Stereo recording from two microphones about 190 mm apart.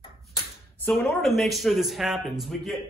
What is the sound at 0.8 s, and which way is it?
A man's voice, centre (ahead or behind).